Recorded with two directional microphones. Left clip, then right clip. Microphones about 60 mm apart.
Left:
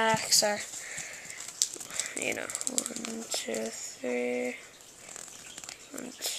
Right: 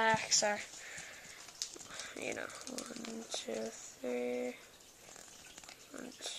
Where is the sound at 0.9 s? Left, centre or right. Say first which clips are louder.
Left 8 dB; centre.